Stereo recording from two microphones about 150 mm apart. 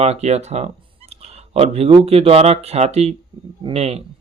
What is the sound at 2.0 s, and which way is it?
Speech, 40° right (ahead or behind).